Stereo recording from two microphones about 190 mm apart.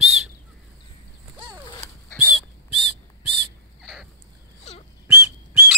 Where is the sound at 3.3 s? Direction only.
Centre (ahead or behind).